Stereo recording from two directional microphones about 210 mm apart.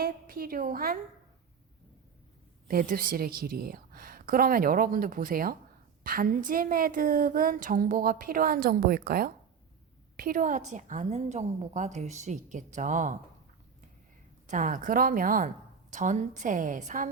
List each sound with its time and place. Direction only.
0.0 s a woman's voice: 45° right (ahead or behind)
2.6 s a woman's voice: 45° right (ahead or behind)
14.4 s a woman's voice: 40° right (ahead or behind)